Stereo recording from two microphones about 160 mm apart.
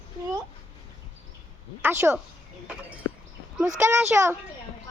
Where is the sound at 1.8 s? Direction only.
15° right (ahead or behind).